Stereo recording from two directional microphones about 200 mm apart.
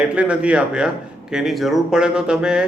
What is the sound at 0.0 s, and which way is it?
A man's voice, 5° right (ahead or behind).